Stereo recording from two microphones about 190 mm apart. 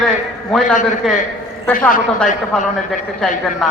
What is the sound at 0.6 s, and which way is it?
Speech, 40° left (ahead or behind).